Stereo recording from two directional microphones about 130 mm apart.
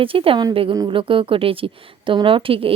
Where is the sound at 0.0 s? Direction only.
45° right (ahead or behind).